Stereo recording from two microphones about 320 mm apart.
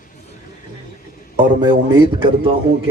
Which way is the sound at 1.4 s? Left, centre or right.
Centre.